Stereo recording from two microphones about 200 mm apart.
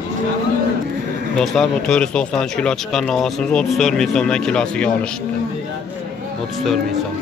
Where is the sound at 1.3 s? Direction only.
Centre (ahead or behind).